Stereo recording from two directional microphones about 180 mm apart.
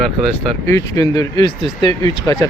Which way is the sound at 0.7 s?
20° left (ahead or behind).